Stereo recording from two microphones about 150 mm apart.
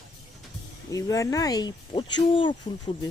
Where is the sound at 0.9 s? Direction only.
20° left (ahead or behind).